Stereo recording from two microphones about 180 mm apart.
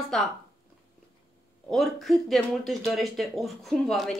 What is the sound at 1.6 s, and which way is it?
A woman's voice, centre (ahead or behind).